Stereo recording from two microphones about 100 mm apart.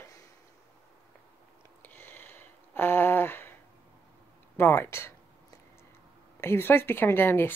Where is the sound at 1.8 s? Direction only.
20° left (ahead or behind).